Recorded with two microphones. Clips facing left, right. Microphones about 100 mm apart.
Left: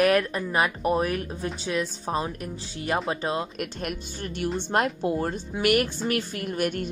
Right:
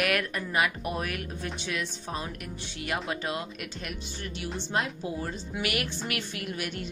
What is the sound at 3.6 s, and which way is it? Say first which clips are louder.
Speech: left 7 dB; 50° left (ahead or behind).